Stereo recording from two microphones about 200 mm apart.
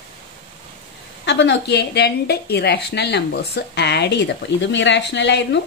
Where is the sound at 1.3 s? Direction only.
60° left (ahead or behind).